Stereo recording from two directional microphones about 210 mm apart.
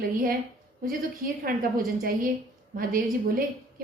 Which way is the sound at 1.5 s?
40° right (ahead or behind).